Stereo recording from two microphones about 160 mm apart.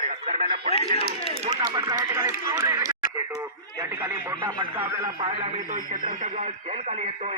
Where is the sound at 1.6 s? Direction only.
25° right (ahead or behind).